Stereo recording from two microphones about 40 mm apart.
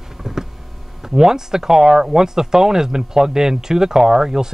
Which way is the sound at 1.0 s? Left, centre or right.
Centre.